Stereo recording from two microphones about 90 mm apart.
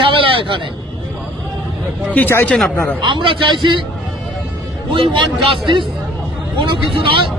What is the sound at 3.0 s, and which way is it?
Speech, 60° right (ahead or behind).